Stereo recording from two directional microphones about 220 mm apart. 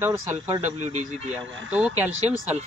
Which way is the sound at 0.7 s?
30° right (ahead or behind).